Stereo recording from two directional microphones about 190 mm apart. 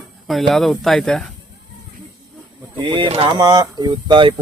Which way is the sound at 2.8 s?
25° right (ahead or behind).